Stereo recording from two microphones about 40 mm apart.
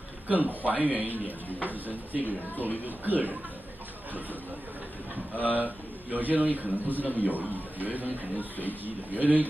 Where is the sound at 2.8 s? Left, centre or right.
Right.